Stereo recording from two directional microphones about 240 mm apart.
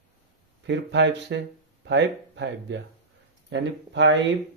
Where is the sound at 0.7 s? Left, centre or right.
Right.